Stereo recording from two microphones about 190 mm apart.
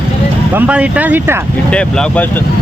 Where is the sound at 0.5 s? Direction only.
5° right (ahead or behind).